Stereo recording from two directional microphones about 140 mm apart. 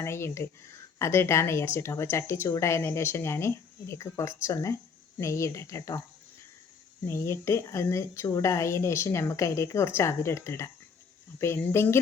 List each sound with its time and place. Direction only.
0.0 s speech: 20° left (ahead or behind)
7.1 s speech: 20° left (ahead or behind)